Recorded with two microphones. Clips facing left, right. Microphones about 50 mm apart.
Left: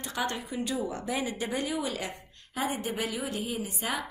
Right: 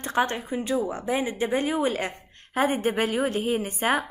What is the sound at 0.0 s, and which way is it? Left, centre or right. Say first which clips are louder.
A woman's voice: right 7 dB; right.